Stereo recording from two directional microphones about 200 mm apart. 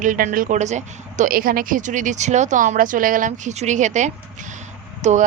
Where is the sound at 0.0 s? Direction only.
40° right (ahead or behind).